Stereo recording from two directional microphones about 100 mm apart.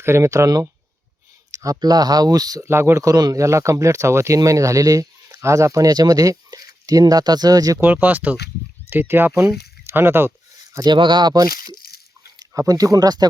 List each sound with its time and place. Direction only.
0.0 s speech: 25° right (ahead or behind)
2.6 s speech: 25° right (ahead or behind)
7.8 s speech: 20° right (ahead or behind)
10.8 s speech: 50° right (ahead or behind)